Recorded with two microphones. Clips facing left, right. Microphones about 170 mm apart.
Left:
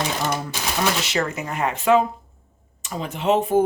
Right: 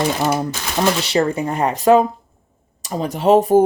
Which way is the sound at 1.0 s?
30° right (ahead or behind).